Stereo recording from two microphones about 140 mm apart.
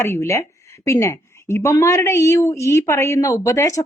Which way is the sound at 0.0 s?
20° left (ahead or behind).